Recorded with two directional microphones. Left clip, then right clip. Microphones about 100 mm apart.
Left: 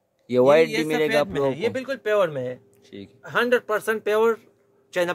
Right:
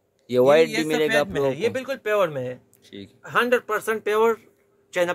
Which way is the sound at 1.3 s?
25° right (ahead or behind).